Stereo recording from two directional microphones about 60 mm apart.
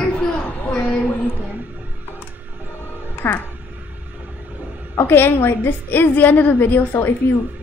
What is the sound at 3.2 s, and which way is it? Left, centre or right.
Speech, left.